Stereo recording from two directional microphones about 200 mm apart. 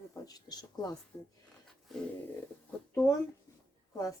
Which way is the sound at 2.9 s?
15° left (ahead or behind).